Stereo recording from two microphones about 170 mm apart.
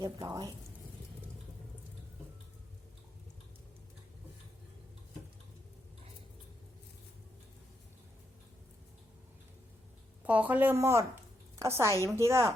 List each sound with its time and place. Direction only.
0.0 s speech: 20° right (ahead or behind)
10.2 s a woman's voice: 10° right (ahead or behind)
11.9 s a woman's voice: 20° left (ahead or behind)
12.1 s speech: 15° right (ahead or behind)